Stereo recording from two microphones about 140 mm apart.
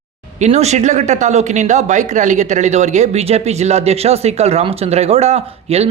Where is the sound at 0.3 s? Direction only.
55° right (ahead or behind).